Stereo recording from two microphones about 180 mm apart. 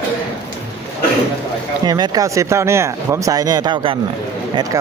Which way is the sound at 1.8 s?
20° right (ahead or behind).